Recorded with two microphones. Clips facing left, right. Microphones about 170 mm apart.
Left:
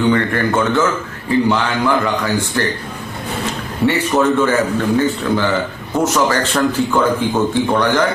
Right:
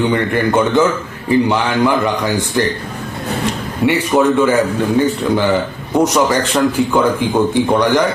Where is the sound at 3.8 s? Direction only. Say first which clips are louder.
Right 2 dB; 15° right (ahead or behind).